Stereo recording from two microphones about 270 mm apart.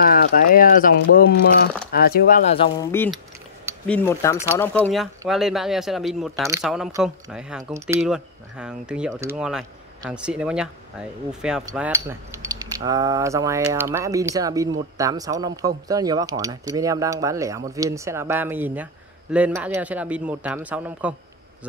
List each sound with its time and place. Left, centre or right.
0.0 s speech: left
2.9 s speech: centre
5.2 s speech: centre